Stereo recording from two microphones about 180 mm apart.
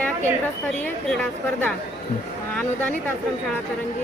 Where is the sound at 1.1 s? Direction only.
5° left (ahead or behind).